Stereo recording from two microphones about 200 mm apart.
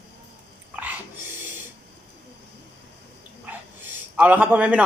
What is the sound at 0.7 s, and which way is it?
Dog, 10° right (ahead or behind).